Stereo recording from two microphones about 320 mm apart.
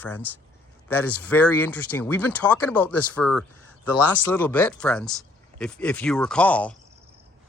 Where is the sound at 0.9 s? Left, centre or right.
Left.